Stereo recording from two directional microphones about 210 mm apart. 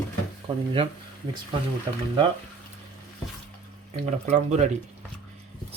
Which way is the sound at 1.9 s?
20° right (ahead or behind).